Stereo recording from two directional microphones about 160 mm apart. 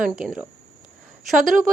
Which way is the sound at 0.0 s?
5° right (ahead or behind).